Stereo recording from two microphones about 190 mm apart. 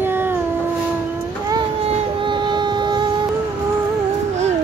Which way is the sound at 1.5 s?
25° right (ahead or behind).